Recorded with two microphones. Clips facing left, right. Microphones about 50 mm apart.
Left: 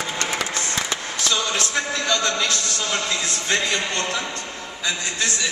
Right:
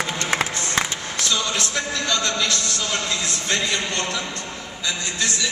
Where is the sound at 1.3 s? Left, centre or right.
Left.